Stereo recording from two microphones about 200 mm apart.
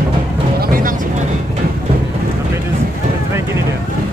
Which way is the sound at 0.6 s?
45° right (ahead or behind).